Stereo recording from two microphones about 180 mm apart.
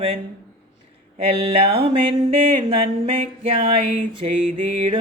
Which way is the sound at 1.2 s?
30° right (ahead or behind).